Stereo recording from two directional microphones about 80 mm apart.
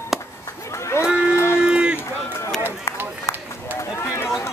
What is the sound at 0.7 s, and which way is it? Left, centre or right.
Crowd, left.